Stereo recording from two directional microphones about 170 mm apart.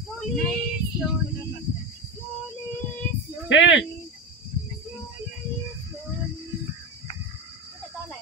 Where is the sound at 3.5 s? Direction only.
90° left.